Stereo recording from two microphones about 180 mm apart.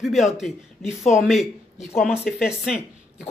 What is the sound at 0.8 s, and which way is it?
Speech, 40° left (ahead or behind).